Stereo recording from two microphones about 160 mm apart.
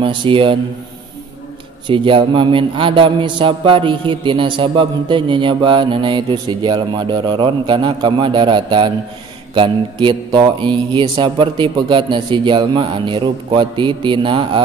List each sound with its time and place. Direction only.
0.0 s a man's voice: 30° right (ahead or behind)
1.9 s a man's voice: 30° right (ahead or behind)